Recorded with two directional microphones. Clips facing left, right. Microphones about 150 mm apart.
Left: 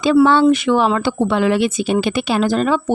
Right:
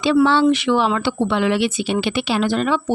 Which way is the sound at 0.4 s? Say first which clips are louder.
Left 3 dB; 45° left (ahead or behind).